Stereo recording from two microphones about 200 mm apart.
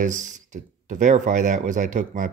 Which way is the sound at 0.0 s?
40° right (ahead or behind).